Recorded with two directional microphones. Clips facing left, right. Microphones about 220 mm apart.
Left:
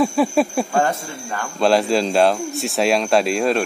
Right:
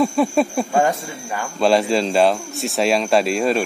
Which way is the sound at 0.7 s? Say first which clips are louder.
Right 4 dB; 10° right (ahead or behind).